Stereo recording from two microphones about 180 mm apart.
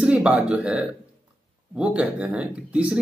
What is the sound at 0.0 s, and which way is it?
Speech, 5° right (ahead or behind).